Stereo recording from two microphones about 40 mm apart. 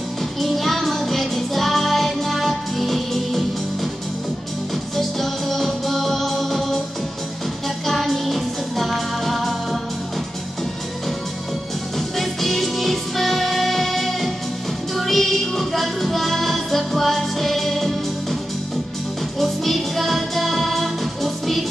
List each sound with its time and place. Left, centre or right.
0.4 s music: centre
4.9 s music: centre
7.8 s music: centre
12.2 s music: centre
19.4 s music: centre